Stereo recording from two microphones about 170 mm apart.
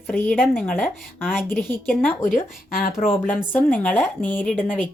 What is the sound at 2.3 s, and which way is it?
Speech, 55° left (ahead or behind).